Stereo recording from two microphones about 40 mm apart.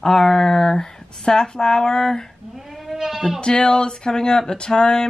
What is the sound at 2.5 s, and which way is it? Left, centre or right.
Goat, centre.